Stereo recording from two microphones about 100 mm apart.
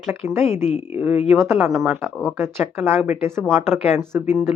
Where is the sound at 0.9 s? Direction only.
25° right (ahead or behind).